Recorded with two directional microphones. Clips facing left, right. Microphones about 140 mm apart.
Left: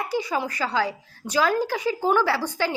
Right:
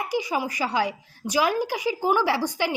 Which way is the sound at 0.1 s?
10° right (ahead or behind).